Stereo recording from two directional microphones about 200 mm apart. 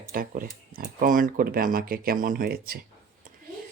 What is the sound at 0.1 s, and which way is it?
Speech, 45° right (ahead or behind).